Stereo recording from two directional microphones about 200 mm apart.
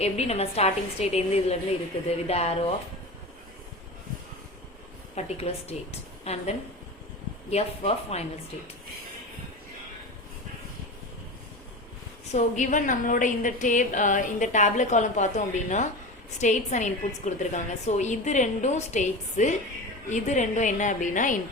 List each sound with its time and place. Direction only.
0.0 s a woman's voice: 30° left (ahead or behind)
5.1 s a woman's voice: 30° left (ahead or behind)
12.3 s a woman's voice: 35° left (ahead or behind)